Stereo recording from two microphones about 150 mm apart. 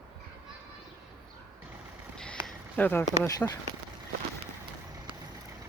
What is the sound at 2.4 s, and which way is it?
Speech, 10° left (ahead or behind).